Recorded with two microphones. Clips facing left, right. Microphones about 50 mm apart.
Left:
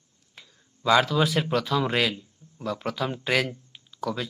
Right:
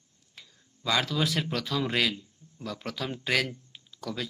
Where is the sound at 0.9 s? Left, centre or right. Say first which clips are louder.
Left 7 dB; centre.